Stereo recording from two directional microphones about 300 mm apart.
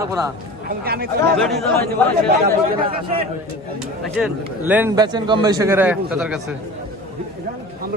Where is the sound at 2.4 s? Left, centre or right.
Centre.